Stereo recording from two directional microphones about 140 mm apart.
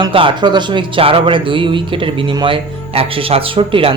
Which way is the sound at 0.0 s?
40° right (ahead or behind).